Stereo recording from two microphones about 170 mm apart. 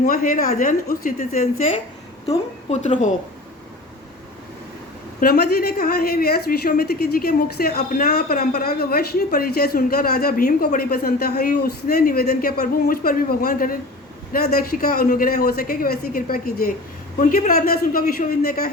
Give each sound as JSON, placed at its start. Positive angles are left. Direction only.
{"t": 0.0, "sound": "a woman's voice", "side_deg": 55}
{"t": 5.2, "sound": "speech", "side_deg": 65}